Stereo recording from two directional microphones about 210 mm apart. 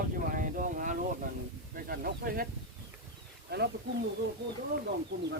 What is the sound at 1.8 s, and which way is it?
Speech, 45° right (ahead or behind).